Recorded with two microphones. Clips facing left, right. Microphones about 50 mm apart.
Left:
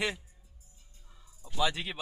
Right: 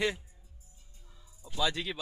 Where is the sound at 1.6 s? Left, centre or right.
Centre.